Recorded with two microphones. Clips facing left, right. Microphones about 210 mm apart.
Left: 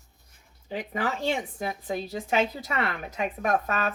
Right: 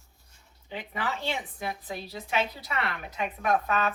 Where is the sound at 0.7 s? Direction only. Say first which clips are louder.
Left 4 dB; 40° left (ahead or behind).